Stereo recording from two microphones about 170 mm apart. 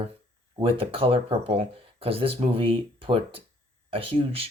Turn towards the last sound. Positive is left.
turn(degrees=-30)  # may be behind; listen again after turning